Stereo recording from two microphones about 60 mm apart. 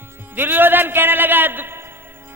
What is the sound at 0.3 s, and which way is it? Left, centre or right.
A man's voice, right.